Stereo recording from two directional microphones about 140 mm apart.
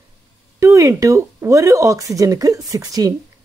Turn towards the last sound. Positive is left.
turn(degrees=-25)  # may be behind; listen again after turning